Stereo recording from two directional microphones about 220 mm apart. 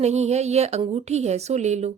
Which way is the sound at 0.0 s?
30° right (ahead or behind).